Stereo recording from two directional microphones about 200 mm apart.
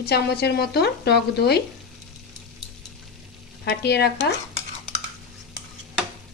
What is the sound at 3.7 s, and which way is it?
Speech, 55° left (ahead or behind).